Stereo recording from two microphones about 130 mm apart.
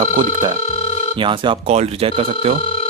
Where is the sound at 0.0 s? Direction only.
65° right (ahead or behind).